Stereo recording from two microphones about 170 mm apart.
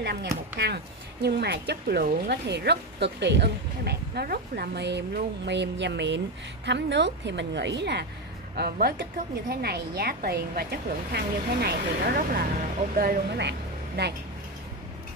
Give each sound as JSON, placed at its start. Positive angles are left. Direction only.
{"t": 0.0, "sound": "a woman's voice", "side_deg": -75}
{"t": 8.5, "sound": "speech", "side_deg": -65}